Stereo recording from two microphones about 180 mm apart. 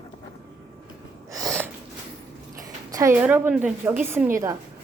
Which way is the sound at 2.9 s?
15° right (ahead or behind).